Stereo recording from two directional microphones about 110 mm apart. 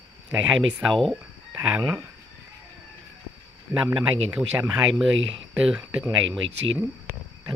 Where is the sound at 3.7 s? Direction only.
20° right (ahead or behind).